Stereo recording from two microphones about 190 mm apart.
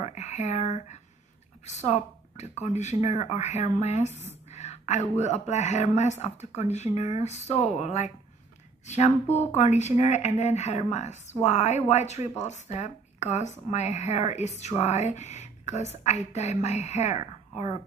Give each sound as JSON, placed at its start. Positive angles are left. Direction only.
{"t": 0.0, "sound": "speech", "side_deg": 35}